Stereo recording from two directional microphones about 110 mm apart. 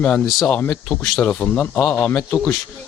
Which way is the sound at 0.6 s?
20° left (ahead or behind).